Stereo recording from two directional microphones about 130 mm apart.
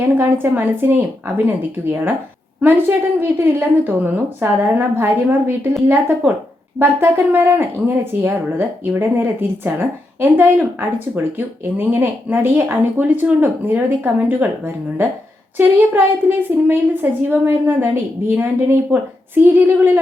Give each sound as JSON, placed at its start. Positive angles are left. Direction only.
{"t": 0.2, "sound": "speech", "side_deg": -15}
{"t": 15.5, "sound": "speech", "side_deg": -15}
{"t": 18.9, "sound": "speech", "side_deg": -15}